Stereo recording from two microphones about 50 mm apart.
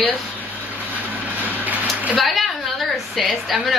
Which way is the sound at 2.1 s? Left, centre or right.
Centre.